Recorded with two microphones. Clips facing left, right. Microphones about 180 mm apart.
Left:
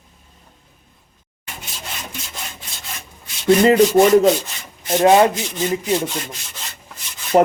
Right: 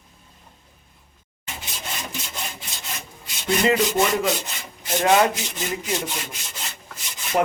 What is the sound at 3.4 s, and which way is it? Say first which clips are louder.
Speech: left 8 dB; 45° left (ahead or behind).